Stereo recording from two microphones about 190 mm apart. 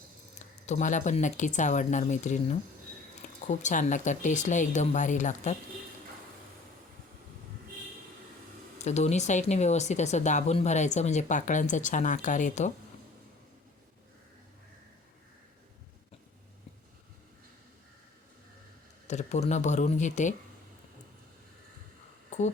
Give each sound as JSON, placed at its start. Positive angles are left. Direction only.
{"t": 0.6, "sound": "speech", "side_deg": 40}
{"t": 8.8, "sound": "speech", "side_deg": 35}
{"t": 19.0, "sound": "speech", "side_deg": 35}
{"t": 22.3, "sound": "a sound", "side_deg": 35}